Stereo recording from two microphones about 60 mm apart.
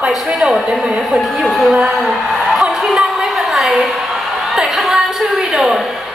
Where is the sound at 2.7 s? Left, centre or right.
Centre.